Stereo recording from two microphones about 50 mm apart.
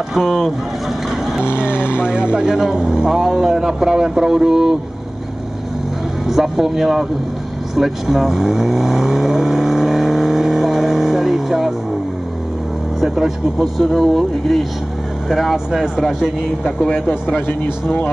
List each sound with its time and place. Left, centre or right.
1.4 s speech: right
1.7 s vehicle: left
2.0 s speech: centre
6.2 s speech: centre
7.7 s vehicle: centre
13.0 s speech: centre